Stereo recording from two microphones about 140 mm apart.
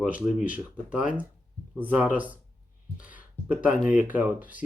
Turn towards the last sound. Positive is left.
turn(degrees=-10)  # may be behind; listen again after turning